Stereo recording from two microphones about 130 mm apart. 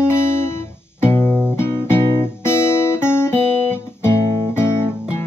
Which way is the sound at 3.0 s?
20° left (ahead or behind).